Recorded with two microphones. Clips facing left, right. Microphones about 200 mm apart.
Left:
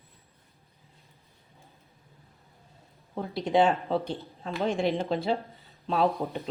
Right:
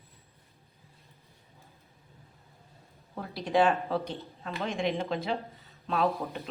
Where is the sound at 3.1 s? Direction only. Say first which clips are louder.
Left 3 dB; 25° left (ahead or behind).